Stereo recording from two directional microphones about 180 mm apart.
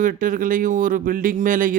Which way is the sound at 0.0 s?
50° right (ahead or behind).